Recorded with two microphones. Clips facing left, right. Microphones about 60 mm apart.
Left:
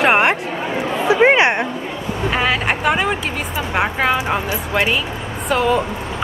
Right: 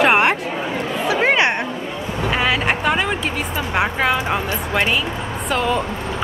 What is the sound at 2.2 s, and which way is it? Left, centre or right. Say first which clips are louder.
A woman's voice: left 1 dB; centre.